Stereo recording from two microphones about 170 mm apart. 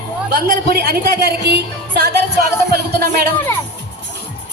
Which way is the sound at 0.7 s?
65° right (ahead or behind).